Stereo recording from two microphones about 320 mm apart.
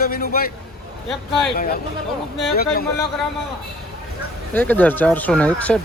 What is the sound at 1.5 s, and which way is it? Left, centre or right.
A man's voice, left.